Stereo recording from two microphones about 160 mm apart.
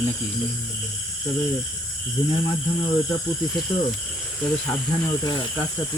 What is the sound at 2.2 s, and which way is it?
Speech, 30° left (ahead or behind).